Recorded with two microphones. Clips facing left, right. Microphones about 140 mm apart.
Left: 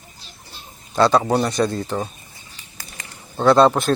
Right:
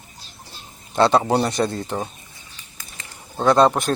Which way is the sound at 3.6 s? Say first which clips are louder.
Left 1 dB; centre (ahead or behind).